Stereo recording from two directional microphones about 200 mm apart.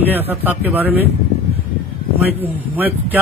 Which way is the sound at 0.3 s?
10° right (ahead or behind).